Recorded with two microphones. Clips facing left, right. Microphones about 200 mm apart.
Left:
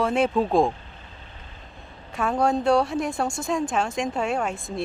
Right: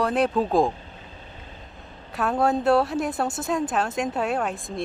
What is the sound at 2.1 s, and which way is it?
Speech, centre (ahead or behind).